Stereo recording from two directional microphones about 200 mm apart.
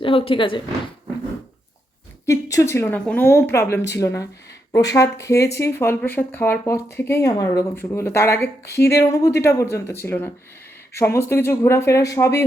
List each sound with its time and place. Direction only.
0.0 s speech: 25° left (ahead or behind)
2.2 s speech: 15° left (ahead or behind)